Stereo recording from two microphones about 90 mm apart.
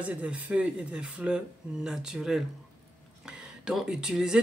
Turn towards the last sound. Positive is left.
turn(degrees=-10)  # may be behind; listen again after turning